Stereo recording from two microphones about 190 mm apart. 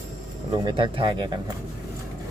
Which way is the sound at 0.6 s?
25° right (ahead or behind).